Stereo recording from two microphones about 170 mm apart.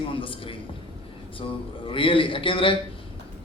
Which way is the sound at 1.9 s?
30° left (ahead or behind).